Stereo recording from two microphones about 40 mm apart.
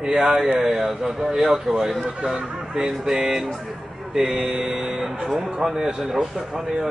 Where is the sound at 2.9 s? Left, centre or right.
Centre.